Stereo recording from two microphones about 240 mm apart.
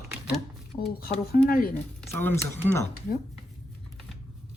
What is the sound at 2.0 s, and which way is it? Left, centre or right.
Speech, centre.